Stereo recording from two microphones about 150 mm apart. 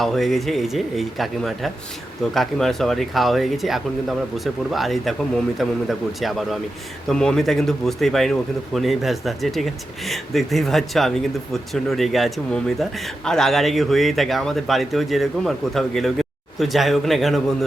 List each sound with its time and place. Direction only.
0.0 s a man's voice: centre (ahead or behind)